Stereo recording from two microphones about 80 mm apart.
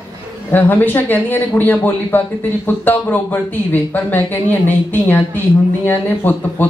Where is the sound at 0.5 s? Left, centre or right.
Left.